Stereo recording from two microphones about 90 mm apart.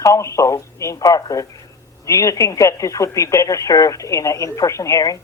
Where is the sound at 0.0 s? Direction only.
35° left (ahead or behind).